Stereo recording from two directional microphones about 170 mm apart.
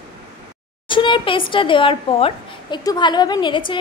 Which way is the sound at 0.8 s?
30° left (ahead or behind).